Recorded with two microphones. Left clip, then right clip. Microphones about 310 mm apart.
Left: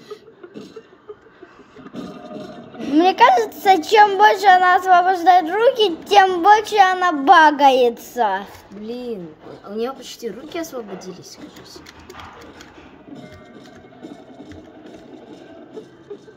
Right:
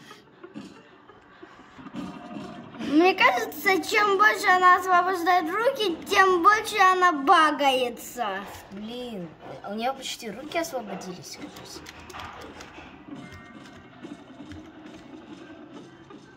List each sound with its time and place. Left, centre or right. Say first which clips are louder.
2.0 s music: left 5 dB; left
2.9 s a woman's voice: left 7 dB; centre